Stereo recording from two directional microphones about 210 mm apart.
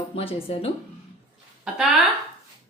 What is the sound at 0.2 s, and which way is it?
Speech, 25° left (ahead or behind).